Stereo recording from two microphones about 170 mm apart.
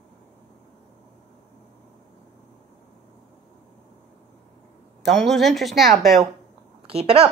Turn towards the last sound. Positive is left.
turn(degrees=-35)  # may be behind; listen again after turning